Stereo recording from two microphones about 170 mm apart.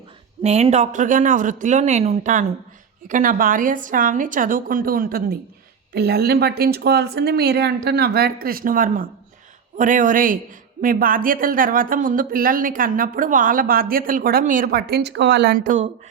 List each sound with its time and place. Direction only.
0.4 s a woman's voice: 40° right (ahead or behind)